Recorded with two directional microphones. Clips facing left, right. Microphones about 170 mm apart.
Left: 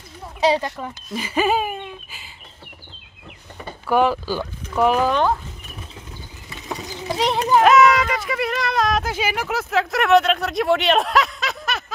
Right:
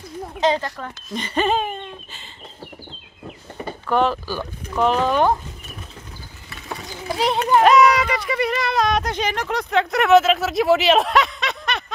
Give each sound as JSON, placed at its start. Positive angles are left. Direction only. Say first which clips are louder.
{"t": 0.4, "sound": "speech", "louder": "left 1 dB", "side_deg": 10}
{"t": 3.8, "sound": "speech", "louder": "left 2 dB", "side_deg": 10}
{"t": 5.1, "sound": "speech", "louder": "right 2 dB", "side_deg": -15}
{"t": 6.5, "sound": "a sound", "louder": "left 2 dB", "side_deg": 20}
{"t": 7.2, "sound": "speech", "louder": "even", "side_deg": 0}